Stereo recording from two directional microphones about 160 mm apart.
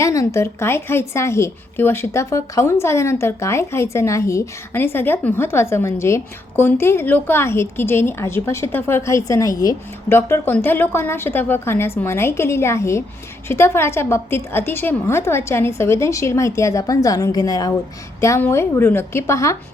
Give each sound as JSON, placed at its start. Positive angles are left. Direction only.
{"t": 0.0, "sound": "a woman's voice", "side_deg": 20}